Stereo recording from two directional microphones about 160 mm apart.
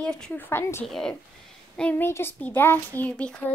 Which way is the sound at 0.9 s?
5° left (ahead or behind).